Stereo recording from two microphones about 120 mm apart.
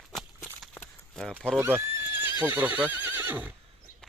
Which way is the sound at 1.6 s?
20° right (ahead or behind).